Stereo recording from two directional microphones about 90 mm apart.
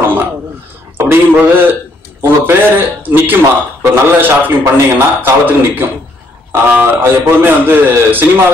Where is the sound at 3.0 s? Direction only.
20° right (ahead or behind).